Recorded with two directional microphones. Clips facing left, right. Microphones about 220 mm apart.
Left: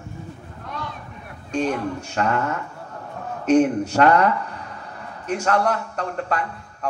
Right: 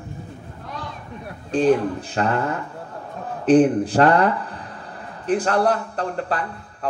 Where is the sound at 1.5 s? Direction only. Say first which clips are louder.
Right 6 dB; 35° right (ahead or behind).